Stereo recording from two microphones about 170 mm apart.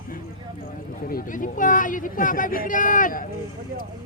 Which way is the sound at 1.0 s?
55° left (ahead or behind).